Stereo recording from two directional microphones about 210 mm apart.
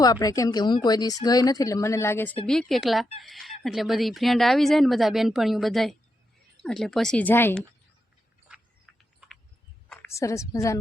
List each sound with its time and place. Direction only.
0.0 s a woman's voice: 15° left (ahead or behind)
8.5 s a sound: 5° right (ahead or behind)
9.9 s a woman's voice: 10° left (ahead or behind)